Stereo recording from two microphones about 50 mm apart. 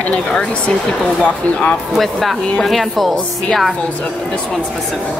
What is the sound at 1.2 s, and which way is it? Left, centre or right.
Speech, left.